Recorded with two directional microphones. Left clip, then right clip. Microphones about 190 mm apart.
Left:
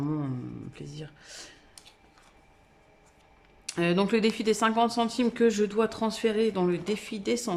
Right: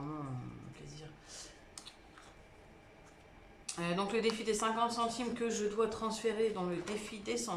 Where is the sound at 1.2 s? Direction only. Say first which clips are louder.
Left 6 dB; 50° left (ahead or behind).